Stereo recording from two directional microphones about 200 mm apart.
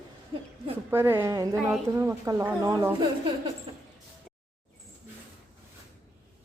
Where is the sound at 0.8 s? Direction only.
10° right (ahead or behind).